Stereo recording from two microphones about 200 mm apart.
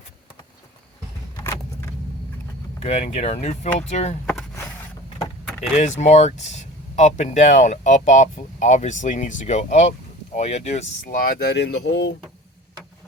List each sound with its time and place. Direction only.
2.8 s speech: 35° left (ahead or behind)
4.3 s a sound: 5° left (ahead or behind)
5.7 s speech: 35° left (ahead or behind); by 12.1 s 65° left (ahead or behind)